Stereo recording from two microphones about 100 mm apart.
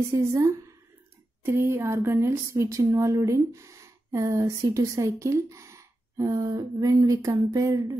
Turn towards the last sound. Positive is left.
turn(degrees=-35)  # may be behind; listen again after turning